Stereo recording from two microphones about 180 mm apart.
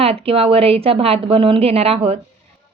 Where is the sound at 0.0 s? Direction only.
35° right (ahead or behind).